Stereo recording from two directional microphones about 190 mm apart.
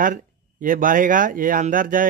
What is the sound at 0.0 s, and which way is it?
Speech, 45° right (ahead or behind).